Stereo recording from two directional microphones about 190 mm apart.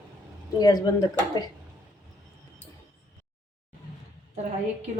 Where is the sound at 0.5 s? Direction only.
20° left (ahead or behind).